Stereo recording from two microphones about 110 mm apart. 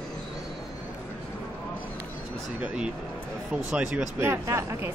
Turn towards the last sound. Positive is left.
turn(degrees=-25)  # may be behind; listen again after turning